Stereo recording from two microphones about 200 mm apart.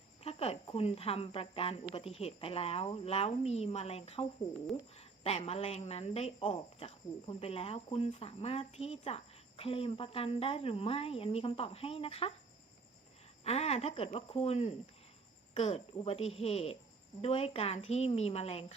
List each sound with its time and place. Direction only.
0.2 s speech: 30° left (ahead or behind)
13.4 s speech: 30° left (ahead or behind)